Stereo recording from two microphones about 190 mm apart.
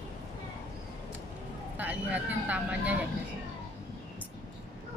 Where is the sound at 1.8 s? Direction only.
10° right (ahead or behind).